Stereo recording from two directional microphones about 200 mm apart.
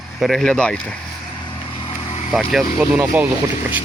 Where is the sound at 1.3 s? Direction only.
20° left (ahead or behind).